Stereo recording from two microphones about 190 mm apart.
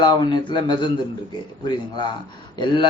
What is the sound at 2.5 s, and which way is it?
Speech, 25° left (ahead or behind).